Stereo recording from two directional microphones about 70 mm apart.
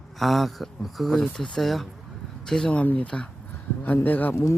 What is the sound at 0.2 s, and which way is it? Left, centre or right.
Speech, centre.